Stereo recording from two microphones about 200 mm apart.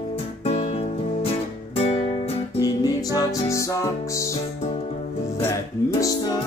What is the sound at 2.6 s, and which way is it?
Music, 20° left (ahead or behind).